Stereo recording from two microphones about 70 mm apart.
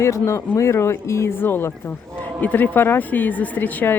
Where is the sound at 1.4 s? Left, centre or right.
Left.